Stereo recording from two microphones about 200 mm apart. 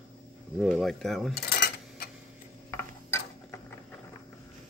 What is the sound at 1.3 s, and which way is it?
Cutlery, 50° left (ahead or behind).